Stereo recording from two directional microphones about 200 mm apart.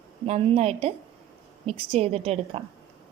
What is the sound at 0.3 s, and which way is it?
A woman's voice, 30° right (ahead or behind).